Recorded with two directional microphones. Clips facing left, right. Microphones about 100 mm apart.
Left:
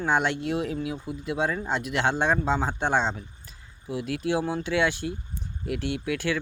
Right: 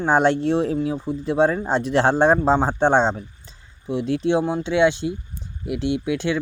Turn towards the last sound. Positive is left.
turn(degrees=-20)  # may be behind; listen again after turning